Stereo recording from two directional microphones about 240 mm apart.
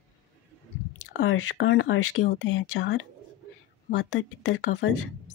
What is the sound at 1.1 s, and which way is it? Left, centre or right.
Speech, left.